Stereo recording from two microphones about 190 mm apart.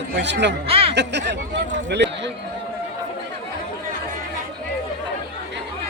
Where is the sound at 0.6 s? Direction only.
30° right (ahead or behind).